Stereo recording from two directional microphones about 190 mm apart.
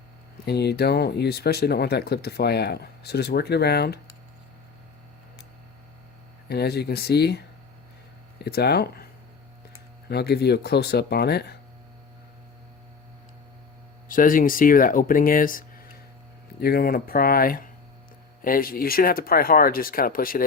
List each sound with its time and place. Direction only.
0.4 s speech: 60° left (ahead or behind)
6.5 s speech: 60° left (ahead or behind)
10.1 s speech: 60° left (ahead or behind)
14.1 s speech: 45° left (ahead or behind)